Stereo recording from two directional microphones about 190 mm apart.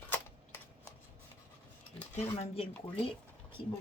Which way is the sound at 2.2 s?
35° left (ahead or behind).